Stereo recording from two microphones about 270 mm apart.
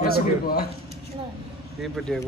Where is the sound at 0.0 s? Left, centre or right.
Left.